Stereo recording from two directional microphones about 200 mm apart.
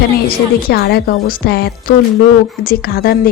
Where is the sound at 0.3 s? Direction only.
50° left (ahead or behind).